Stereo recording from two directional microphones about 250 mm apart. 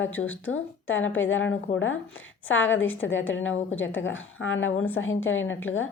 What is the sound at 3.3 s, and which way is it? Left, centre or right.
A woman's voice, left.